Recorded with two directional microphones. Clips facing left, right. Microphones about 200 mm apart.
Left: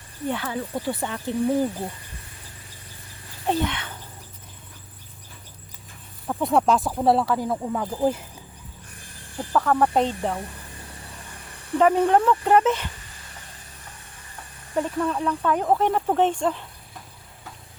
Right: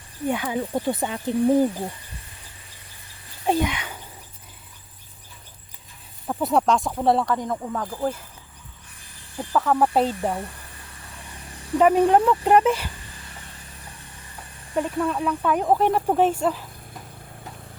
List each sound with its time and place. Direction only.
0.3 s speech: 15° right (ahead or behind)
3.4 s a child's voice: 10° right (ahead or behind)
6.2 s speech: centre (ahead or behind); by 8.1 s 15° left (ahead or behind)
9.4 s speech: centre (ahead or behind)
11.8 s speech: 15° right (ahead or behind)
14.8 s speech: 5° right (ahead or behind)